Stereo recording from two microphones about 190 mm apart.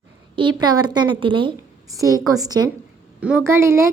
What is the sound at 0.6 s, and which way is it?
A woman's voice, 20° right (ahead or behind).